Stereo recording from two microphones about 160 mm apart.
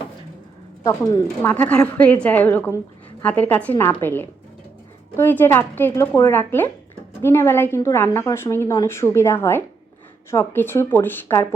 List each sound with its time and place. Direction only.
0.9 s a woman's voice: 20° left (ahead or behind)